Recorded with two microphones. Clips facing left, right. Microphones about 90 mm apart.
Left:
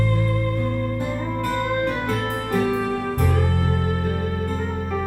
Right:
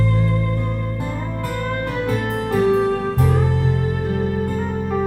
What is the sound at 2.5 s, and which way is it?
Music, 20° right (ahead or behind).